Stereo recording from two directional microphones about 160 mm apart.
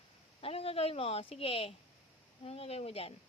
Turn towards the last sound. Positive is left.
turn(degrees=40)  # may be behind; listen again after turning